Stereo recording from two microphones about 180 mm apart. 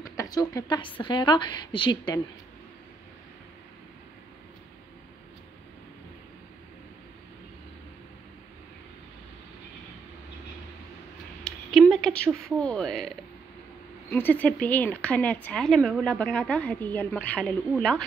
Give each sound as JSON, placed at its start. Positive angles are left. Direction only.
{"t": 0.0, "sound": "a woman's voice", "side_deg": 20}
{"t": 11.4, "sound": "a sound", "side_deg": 0}
{"t": 14.1, "sound": "a woman's voice", "side_deg": 10}